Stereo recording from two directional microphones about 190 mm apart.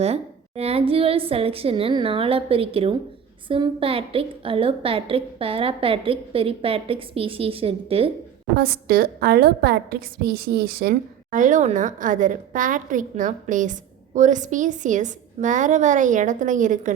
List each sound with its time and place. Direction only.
0.0 s a woman's voice: 35° right (ahead or behind)
8.5 s a woman's voice: 50° right (ahead or behind)